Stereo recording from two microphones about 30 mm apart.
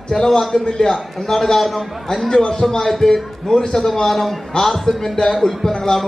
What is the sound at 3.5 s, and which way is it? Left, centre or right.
Speech, left.